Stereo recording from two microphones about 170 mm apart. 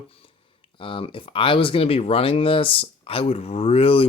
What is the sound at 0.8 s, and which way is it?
Speech, 30° left (ahead or behind).